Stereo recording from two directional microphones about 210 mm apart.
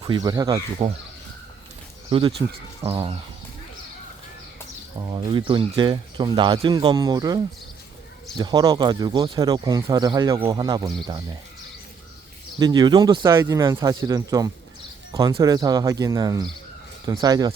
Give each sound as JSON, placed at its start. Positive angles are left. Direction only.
{"t": 0.0, "sound": "speech", "side_deg": -20}
{"t": 2.0, "sound": "speech", "side_deg": -25}
{"t": 4.9, "sound": "speech", "side_deg": -20}
{"t": 12.5, "sound": "speech", "side_deg": -20}